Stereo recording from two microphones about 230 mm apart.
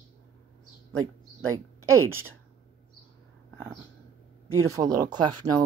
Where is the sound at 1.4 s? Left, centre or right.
Centre.